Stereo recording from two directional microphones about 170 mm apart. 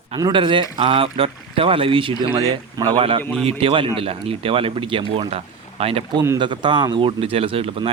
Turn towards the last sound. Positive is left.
turn(degrees=-35)  # may be behind; listen again after turning